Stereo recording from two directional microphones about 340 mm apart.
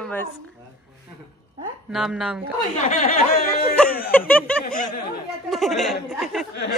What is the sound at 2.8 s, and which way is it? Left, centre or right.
Speech, left.